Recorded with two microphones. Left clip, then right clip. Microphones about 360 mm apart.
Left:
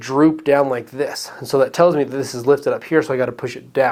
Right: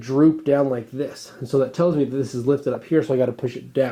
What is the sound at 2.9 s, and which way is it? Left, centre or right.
Speech, left.